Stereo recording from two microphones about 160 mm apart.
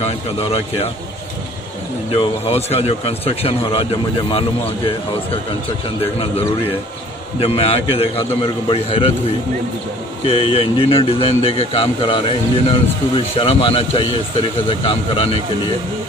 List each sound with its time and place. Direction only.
0.0 s a man's voice: 40° left (ahead or behind)
2.1 s a man's voice: 40° left (ahead or behind)
7.3 s a man's voice: 40° left (ahead or behind)
10.2 s a man's voice: 35° left (ahead or behind)